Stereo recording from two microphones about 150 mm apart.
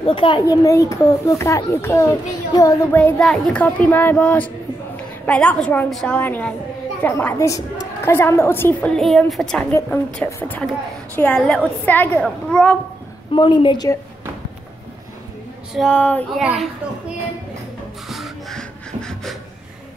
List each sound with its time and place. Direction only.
0.0 s a woman's voice: 35° left (ahead or behind)
0.7 s a child's voice: 20° left (ahead or behind)
3.0 s a child's voice: 5° left (ahead or behind)
8.9 s a woman's voice: centre (ahead or behind)
13.3 s a woman's voice: 30° left (ahead or behind)
15.7 s a child's voice: 5° left (ahead or behind)
16.3 s a woman's voice: centre (ahead or behind)
18.0 s a sound: centre (ahead or behind)